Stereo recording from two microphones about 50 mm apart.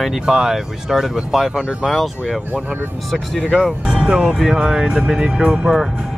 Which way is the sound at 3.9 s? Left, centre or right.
Centre.